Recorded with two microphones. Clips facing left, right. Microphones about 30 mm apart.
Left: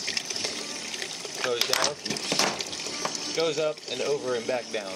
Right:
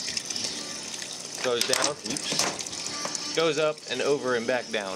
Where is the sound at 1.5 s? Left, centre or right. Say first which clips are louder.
Even; centre.